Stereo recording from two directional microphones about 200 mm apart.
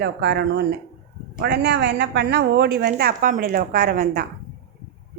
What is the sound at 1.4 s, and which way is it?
A woman's voice, 55° right (ahead or behind).